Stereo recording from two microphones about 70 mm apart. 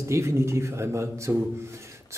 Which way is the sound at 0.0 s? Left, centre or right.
Right.